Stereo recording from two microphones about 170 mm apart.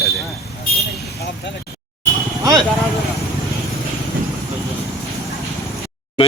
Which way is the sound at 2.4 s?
20° right (ahead or behind).